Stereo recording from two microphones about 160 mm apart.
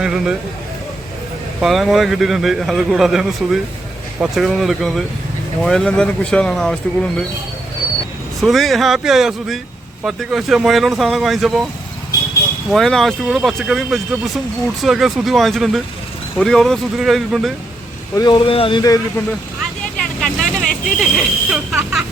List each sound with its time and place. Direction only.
0.0 s a man's voice: 5° right (ahead or behind)
1.6 s a man's voice: centre (ahead or behind)
8.4 s a man's voice: centre (ahead or behind)
12.7 s a man's voice: centre (ahead or behind)
18.1 s speech: 25° left (ahead or behind)
20.2 s vehicle: centre (ahead or behind)
20.8 s a man's voice: centre (ahead or behind)